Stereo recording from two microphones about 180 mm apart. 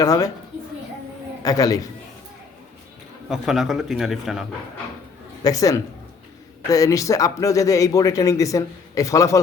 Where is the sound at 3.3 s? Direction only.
Centre (ahead or behind).